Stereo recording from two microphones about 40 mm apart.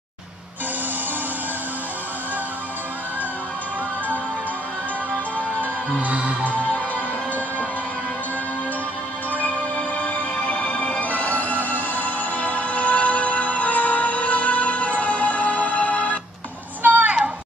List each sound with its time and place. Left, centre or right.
6.0 s music: right
10.5 s music: left
11.0 s music: left
16.8 s a sound: right